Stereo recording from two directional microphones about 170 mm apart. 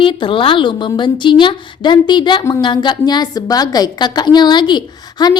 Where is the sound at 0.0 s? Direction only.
30° left (ahead or behind).